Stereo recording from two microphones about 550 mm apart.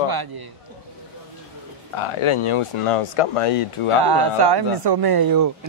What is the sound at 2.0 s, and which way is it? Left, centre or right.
Speech, left.